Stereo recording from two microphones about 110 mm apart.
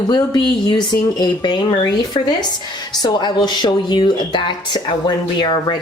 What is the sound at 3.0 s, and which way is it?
Speech, 40° left (ahead or behind).